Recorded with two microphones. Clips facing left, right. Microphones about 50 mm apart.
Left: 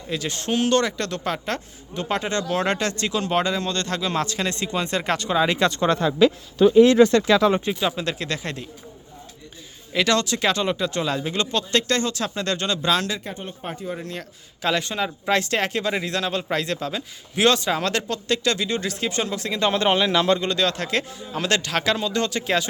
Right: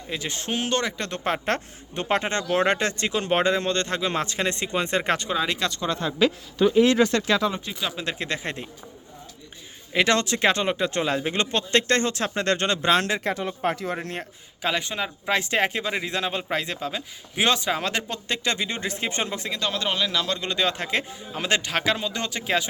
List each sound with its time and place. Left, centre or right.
0.1 s speech: centre
1.1 s speech: right
5.3 s speech: centre
5.9 s speech: left
7.7 s speech: centre
8.0 s speech: right
9.9 s speech: right
13.2 s speech: right
14.6 s speech: centre
19.5 s speech: left
20.4 s speech: centre